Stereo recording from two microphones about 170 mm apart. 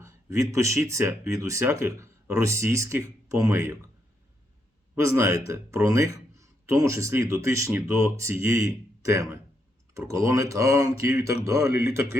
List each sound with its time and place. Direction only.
0.0 s speech: 20° right (ahead or behind)
4.9 s speech: 15° right (ahead or behind)